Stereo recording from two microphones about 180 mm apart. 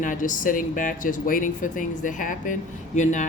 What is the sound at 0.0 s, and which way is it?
Speech, 45° left (ahead or behind).